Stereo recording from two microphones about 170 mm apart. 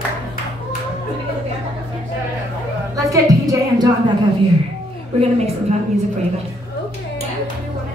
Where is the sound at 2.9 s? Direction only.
20° right (ahead or behind).